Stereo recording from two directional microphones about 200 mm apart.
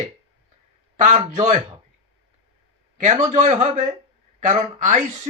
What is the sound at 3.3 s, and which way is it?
Speech, 35° right (ahead or behind).